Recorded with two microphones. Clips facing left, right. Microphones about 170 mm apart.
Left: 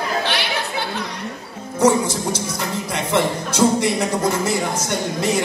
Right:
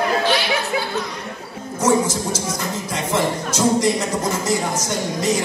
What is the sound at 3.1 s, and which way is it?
Music, 65° left (ahead or behind).